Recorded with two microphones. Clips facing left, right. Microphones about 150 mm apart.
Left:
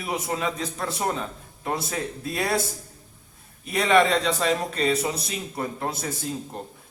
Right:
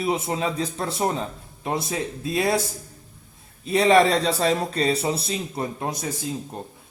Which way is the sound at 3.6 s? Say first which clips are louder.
Right 3 dB; 30° right (ahead or behind).